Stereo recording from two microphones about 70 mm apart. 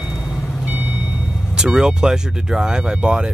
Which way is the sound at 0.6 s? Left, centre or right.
Right.